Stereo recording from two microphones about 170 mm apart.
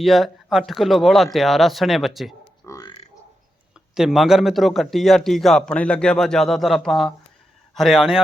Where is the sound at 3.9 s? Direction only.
Centre (ahead or behind).